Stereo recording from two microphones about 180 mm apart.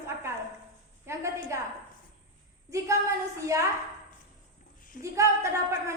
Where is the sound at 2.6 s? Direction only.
15° right (ahead or behind).